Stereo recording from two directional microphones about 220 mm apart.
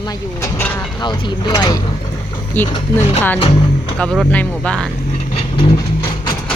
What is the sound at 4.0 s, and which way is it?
Speech, 5° left (ahead or behind).